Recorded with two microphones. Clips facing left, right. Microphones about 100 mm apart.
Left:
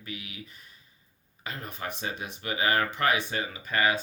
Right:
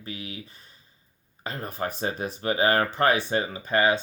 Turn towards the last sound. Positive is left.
turn(degrees=-30)  # may be behind; listen again after turning